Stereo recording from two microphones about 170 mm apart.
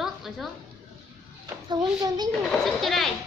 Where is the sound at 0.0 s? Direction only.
Centre (ahead or behind).